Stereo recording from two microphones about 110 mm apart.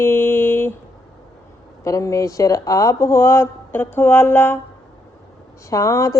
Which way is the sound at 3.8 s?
15° left (ahead or behind).